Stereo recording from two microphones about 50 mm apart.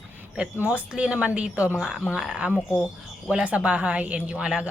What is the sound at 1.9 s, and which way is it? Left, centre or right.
Speech, centre.